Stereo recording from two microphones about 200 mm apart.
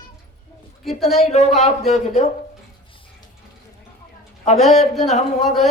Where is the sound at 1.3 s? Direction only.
35° left (ahead or behind).